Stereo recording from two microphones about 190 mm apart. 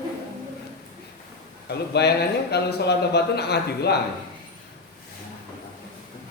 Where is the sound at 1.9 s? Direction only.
60° left (ahead or behind).